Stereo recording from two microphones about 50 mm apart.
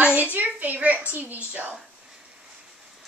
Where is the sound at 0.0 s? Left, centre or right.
Right.